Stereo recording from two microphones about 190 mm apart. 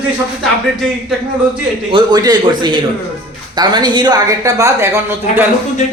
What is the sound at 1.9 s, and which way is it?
A woman's voice, 20° right (ahead or behind).